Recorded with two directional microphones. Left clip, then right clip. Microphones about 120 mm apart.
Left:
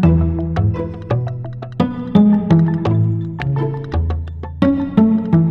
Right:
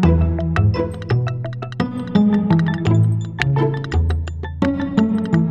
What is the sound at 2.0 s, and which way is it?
Music, centre (ahead or behind).